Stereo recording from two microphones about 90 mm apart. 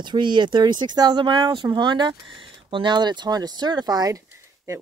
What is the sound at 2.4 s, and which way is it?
Speech, 70° right (ahead or behind).